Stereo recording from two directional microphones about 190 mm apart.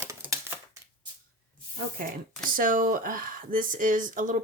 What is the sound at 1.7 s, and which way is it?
Speech, 45° right (ahead or behind).